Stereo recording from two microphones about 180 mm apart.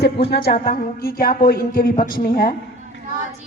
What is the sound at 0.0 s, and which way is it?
A woman's voice, 65° left (ahead or behind).